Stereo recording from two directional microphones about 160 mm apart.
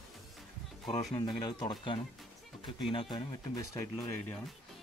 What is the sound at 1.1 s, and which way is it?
Speech, 25° left (ahead or behind).